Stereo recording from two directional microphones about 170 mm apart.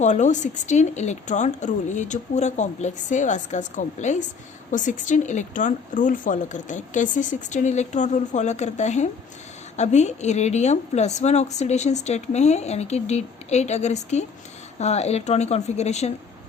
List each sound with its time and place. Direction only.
0.0 s a woman's voice: 45° left (ahead or behind)